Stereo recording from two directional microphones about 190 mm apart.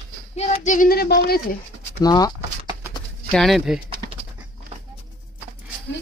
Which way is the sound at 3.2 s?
Centre (ahead or behind).